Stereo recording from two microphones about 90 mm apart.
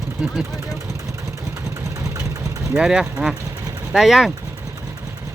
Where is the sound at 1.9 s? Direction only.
30° right (ahead or behind).